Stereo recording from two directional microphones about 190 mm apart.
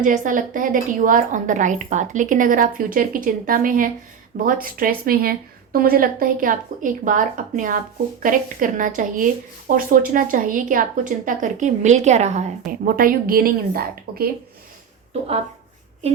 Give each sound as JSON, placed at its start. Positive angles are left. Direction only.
{"t": 0.0, "sound": "a woman's voice", "side_deg": -45}